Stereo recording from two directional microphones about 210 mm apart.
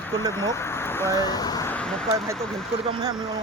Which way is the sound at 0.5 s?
10° left (ahead or behind).